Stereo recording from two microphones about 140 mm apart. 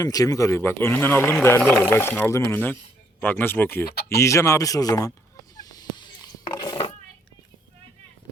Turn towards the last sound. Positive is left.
turn(degrees=35)  # may be behind; listen again after turning